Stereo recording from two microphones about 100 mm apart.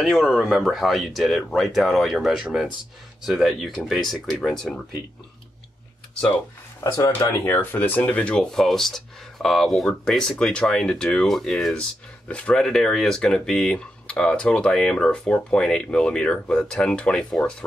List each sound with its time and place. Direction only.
0.0 s speech: centre (ahead or behind)
6.8 s speech: 35° left (ahead or behind)
7.5 s speech: 20° left (ahead or behind)